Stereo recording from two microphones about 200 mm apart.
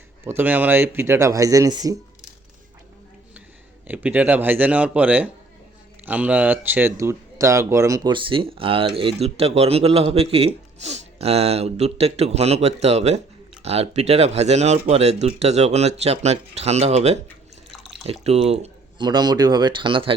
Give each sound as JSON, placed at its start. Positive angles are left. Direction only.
{"t": 0.3, "sound": "speech", "side_deg": -10}
{"t": 3.8, "sound": "speech", "side_deg": -5}